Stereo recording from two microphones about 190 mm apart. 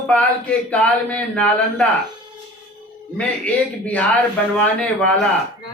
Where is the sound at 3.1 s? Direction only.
5° left (ahead or behind).